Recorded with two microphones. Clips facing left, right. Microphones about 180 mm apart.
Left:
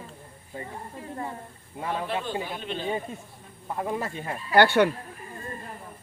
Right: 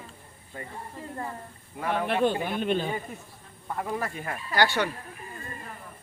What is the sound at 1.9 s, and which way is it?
Speech, 65° right (ahead or behind).